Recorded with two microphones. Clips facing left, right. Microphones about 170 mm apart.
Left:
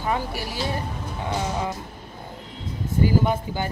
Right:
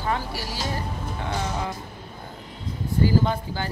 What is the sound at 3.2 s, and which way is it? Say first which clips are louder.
Speech: left 2 dB; 15° left (ahead or behind).